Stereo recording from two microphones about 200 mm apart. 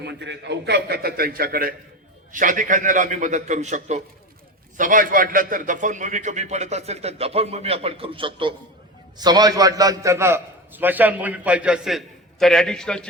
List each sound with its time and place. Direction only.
0.0 s a man's voice: 60° right (ahead or behind); by 13.1 s 5° left (ahead or behind)